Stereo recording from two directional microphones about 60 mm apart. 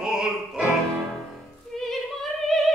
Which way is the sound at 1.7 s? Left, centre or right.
Centre.